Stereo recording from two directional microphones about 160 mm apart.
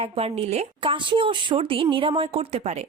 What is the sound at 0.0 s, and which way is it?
Speech, 40° right (ahead or behind).